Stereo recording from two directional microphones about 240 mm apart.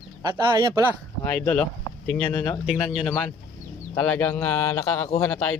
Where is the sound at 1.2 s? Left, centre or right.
Centre.